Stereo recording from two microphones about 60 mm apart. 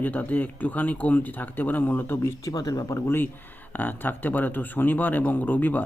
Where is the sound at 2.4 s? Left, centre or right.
Left.